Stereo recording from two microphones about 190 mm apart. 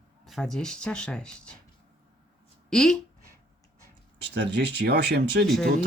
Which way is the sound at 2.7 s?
5° left (ahead or behind).